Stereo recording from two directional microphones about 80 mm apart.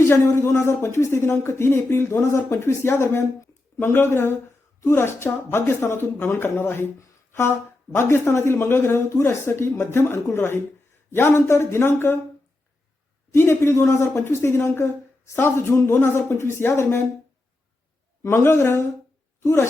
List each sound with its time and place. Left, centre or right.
0.0 s speech: left
13.3 s speech: left
18.2 s a woman's voice: left